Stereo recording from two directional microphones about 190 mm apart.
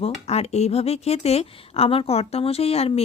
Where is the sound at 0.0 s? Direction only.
35° left (ahead or behind).